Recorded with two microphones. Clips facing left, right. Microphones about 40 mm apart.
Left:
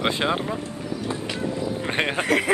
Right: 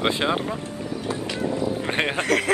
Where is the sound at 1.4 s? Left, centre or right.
Right.